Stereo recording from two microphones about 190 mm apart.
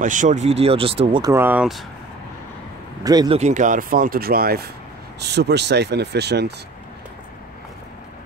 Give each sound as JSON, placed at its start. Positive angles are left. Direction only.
{"t": 0.0, "sound": "speech", "side_deg": -40}
{"t": 1.3, "sound": "speech", "side_deg": -10}
{"t": 3.0, "sound": "speech", "side_deg": -20}
{"t": 3.3, "sound": "speech", "side_deg": -40}